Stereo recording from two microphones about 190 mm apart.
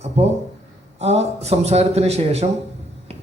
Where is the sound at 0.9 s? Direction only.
35° right (ahead or behind).